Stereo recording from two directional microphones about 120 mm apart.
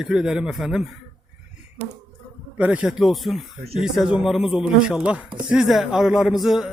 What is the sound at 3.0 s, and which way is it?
A man's voice, centre (ahead or behind).